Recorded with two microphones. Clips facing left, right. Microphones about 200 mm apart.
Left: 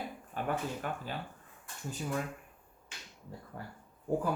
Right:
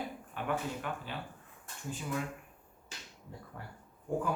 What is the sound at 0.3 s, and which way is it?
Speech, 40° left (ahead or behind).